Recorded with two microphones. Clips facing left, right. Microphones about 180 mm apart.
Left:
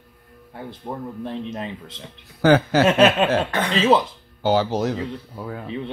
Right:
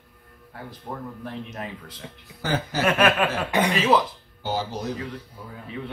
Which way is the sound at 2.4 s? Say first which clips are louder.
Left 11 dB; 75° left (ahead or behind).